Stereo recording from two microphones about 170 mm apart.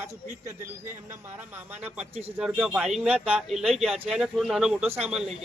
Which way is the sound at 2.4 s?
5° right (ahead or behind).